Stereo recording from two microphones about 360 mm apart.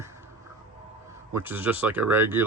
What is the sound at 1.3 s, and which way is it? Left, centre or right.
Speech, centre.